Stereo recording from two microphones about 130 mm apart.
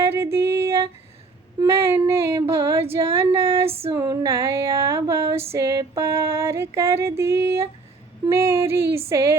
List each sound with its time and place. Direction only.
0.0 s a sound: 20° right (ahead or behind)
1.6 s female singing: 20° right (ahead or behind)
3.7 s female singing: 50° right (ahead or behind)
3.9 s female singing: 25° right (ahead or behind)